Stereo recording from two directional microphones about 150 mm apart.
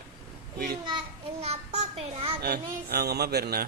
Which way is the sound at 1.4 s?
45° right (ahead or behind).